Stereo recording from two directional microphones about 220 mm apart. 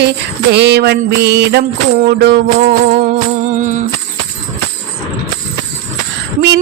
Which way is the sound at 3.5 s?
35° right (ahead or behind).